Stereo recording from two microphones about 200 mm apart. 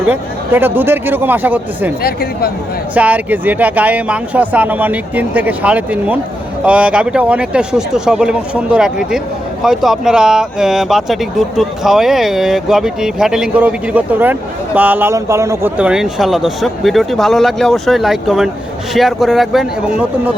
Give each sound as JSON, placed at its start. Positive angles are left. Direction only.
{"t": 0.0, "sound": "speech", "side_deg": -10}
{"t": 2.0, "sound": "speech", "side_deg": 50}
{"t": 2.9, "sound": "speech", "side_deg": -10}